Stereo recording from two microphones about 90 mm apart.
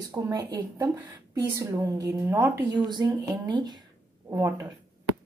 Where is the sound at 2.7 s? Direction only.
55° right (ahead or behind).